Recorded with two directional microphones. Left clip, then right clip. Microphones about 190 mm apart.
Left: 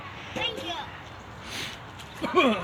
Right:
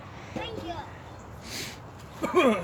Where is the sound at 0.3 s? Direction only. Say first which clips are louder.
Left 5 dB; 50° right (ahead or behind).